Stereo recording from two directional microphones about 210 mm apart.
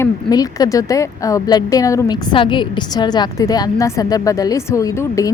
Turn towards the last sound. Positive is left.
turn(degrees=15)  # may be behind; listen again after turning